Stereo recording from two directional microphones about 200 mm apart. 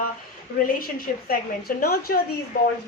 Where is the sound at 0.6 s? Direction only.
45° left (ahead or behind).